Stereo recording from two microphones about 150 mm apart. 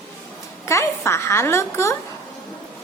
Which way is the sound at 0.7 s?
20° left (ahead or behind).